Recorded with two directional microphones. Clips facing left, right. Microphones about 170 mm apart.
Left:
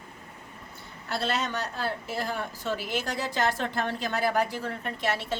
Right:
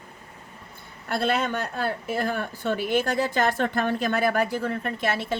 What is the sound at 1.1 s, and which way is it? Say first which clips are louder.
Speech: right 5 dB; 55° right (ahead or behind).